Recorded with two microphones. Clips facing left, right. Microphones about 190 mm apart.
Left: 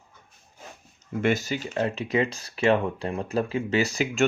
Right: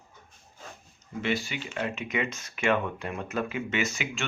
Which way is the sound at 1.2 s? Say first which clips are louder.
Left 6 dB; 45° left (ahead or behind).